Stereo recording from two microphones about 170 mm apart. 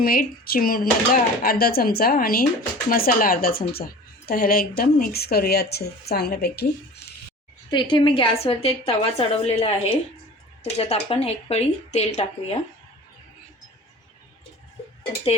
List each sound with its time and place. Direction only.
0.0 s a woman's voice: 60° left (ahead or behind)
7.7 s a woman's voice: 25° left (ahead or behind)